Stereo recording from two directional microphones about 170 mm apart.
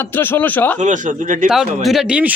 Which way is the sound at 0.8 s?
50° right (ahead or behind).